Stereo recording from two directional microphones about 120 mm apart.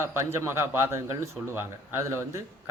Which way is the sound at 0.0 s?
20° right (ahead or behind).